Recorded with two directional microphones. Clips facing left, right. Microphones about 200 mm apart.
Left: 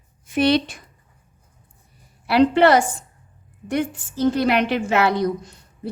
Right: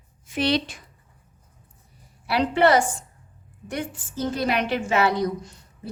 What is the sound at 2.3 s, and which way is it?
Speech, 65° left (ahead or behind).